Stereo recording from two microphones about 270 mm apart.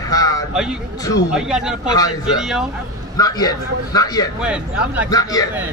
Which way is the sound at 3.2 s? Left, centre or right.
Centre.